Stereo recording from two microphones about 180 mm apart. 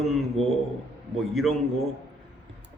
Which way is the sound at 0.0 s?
Centre (ahead or behind).